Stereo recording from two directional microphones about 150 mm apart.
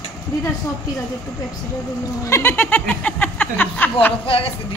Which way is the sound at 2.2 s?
15° left (ahead or behind).